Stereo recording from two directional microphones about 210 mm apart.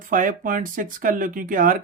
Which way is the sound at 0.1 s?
40° right (ahead or behind).